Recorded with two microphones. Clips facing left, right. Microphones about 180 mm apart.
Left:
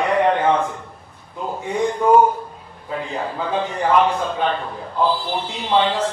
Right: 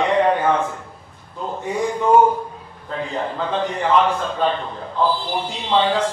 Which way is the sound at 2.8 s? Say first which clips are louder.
Right 1 dB; 10° left (ahead or behind).